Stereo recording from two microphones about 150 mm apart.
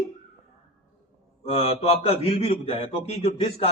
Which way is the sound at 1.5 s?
40° left (ahead or behind).